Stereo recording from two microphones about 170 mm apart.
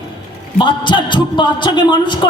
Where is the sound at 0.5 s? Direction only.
30° left (ahead or behind).